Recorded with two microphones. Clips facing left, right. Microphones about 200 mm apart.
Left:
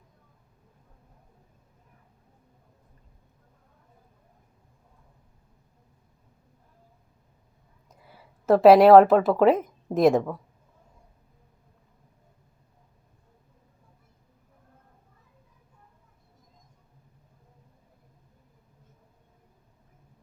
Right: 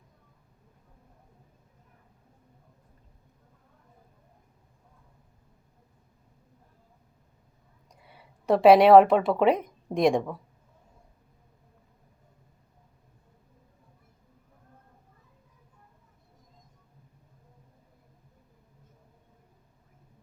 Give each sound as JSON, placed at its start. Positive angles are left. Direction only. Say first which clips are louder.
{"t": 7.9, "sound": "speech", "louder": "left 2 dB", "side_deg": 0}